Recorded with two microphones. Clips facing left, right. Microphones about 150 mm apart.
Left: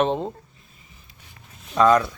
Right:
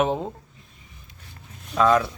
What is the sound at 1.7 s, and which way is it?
Speech, centre (ahead or behind).